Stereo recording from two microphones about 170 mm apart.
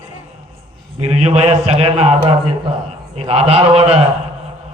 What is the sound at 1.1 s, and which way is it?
A man's voice, 40° right (ahead or behind).